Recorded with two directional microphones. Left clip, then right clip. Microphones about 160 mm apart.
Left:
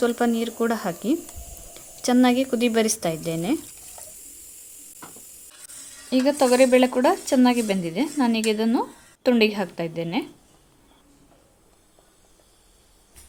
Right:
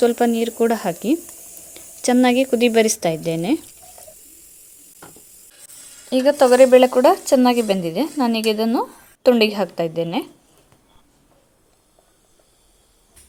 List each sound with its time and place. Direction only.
0.0 s a woman's voice: 25° right (ahead or behind)
6.1 s speech: 15° right (ahead or behind)